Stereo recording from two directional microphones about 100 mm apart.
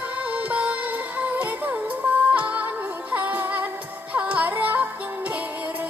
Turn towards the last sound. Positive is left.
turn(degrees=-15)  # may be behind; listen again after turning